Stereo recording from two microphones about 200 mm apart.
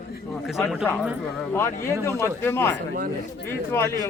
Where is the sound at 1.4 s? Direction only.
10° left (ahead or behind).